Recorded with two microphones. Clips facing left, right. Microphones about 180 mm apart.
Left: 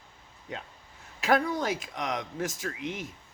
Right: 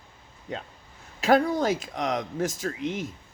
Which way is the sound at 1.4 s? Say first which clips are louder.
Right 5 dB; 45° right (ahead or behind).